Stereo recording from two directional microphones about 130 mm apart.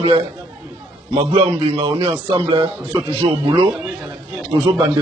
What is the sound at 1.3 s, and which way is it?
Speech, 50° right (ahead or behind).